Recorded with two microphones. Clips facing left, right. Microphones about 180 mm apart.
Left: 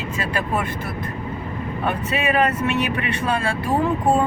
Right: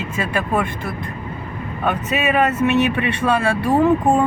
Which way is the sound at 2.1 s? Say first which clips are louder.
Right 2 dB; 20° right (ahead or behind).